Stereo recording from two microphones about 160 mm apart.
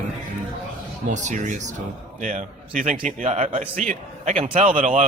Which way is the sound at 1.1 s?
50° right (ahead or behind).